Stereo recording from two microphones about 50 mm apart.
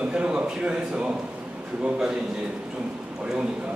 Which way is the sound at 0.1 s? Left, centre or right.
Right.